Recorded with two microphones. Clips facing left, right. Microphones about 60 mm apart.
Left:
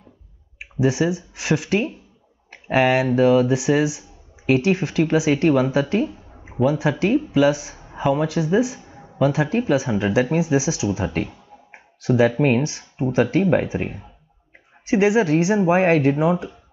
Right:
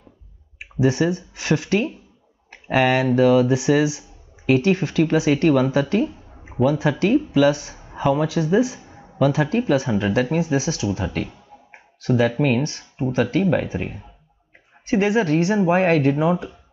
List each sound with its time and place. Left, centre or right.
0.7 s speech: centre
11.2 s a sound: centre
12.4 s speech: left
12.6 s speech: centre
13.1 s speech: left; by 16.5 s centre